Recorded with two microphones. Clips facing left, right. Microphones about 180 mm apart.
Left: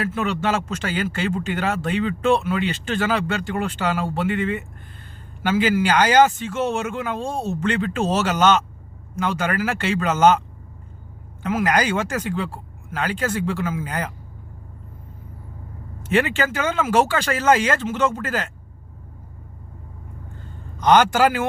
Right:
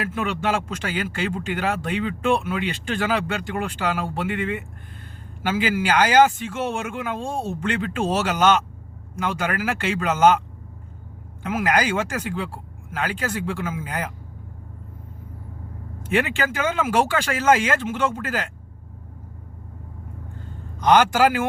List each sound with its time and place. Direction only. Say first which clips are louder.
0.0 s a man's voice: left 2 dB; 10° right (ahead or behind)
11.4 s a man's voice: left 1 dB; 10° right (ahead or behind)
16.0 s a man's voice: left 2 dB; 10° right (ahead or behind)
20.8 s a man's voice: left 1 dB; 10° right (ahead or behind)